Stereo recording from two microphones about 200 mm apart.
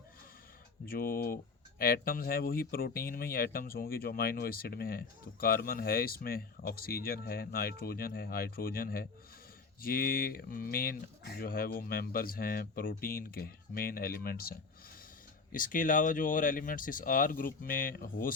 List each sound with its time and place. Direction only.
0.9 s speech: 45° left (ahead or behind)
15.5 s speech: 40° left (ahead or behind)